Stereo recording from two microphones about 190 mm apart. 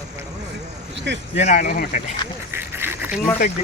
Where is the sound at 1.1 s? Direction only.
70° right (ahead or behind).